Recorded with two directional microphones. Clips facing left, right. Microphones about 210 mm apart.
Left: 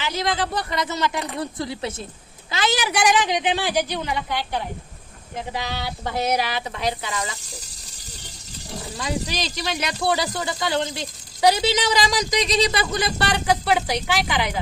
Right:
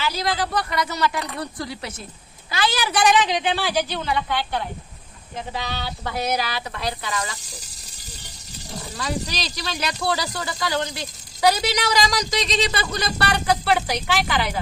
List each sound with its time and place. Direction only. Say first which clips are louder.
0.0 s a woman's voice: even; 20° left (ahead or behind)
9.0 s speech: left 1 dB; 20° left (ahead or behind)